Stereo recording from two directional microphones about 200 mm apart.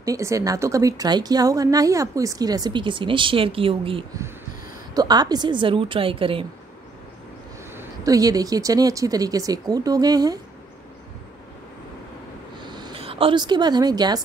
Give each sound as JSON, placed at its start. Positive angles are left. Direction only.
{"t": 0.0, "sound": "a woman's voice", "side_deg": -15}
{"t": 7.7, "sound": "speech", "side_deg": -15}
{"t": 12.5, "sound": "a sound", "side_deg": -20}